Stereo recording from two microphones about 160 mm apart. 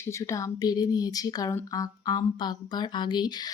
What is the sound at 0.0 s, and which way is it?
Speech, 20° left (ahead or behind).